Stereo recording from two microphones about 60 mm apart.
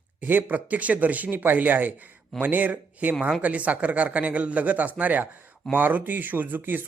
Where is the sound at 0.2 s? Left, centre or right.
Right.